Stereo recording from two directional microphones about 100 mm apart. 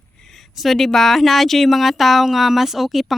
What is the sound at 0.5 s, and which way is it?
A woman's voice, centre (ahead or behind).